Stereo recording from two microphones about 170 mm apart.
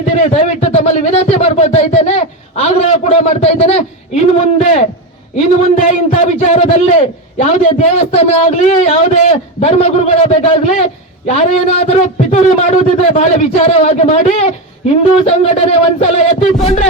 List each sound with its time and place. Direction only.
0.0 s a man's voice: 45° left (ahead or behind)